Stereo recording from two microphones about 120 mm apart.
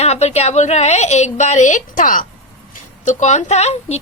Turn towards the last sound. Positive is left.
turn(degrees=65)  # may be behind; listen again after turning